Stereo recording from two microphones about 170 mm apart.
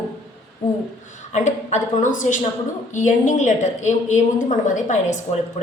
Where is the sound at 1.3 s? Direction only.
45° left (ahead or behind).